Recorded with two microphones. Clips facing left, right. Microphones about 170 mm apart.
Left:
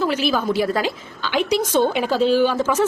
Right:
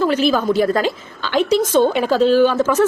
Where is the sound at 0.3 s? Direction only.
10° left (ahead or behind).